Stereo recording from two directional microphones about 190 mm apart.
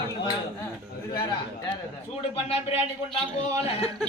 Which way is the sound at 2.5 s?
30° left (ahead or behind).